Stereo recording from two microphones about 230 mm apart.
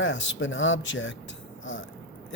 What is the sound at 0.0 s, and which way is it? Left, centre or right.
Speech, left.